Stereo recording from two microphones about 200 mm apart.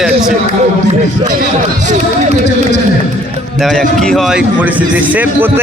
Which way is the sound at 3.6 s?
Centre (ahead or behind).